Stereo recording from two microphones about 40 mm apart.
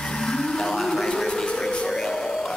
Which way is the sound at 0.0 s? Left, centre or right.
Centre.